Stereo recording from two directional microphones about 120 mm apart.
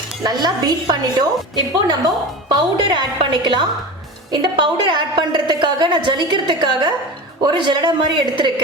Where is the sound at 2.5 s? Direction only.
35° right (ahead or behind).